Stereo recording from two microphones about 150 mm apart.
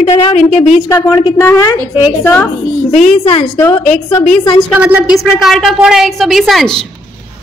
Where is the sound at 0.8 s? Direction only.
20° left (ahead or behind).